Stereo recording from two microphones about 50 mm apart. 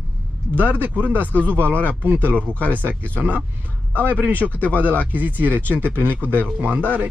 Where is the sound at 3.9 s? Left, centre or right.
Left.